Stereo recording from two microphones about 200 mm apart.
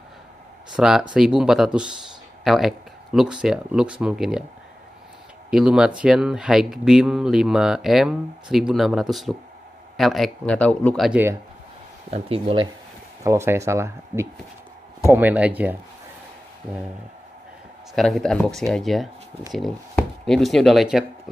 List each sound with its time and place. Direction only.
0.7 s speech: 5° right (ahead or behind)
5.5 s speech: 5° right (ahead or behind)
11.1 s speech: 10° right (ahead or behind)
12.1 s speech: 30° right (ahead or behind)
13.2 s speech: 15° right (ahead or behind)
17.9 s speech: centre (ahead or behind)